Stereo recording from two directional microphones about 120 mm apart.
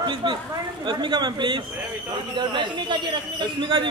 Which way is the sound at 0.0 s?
40° right (ahead or behind).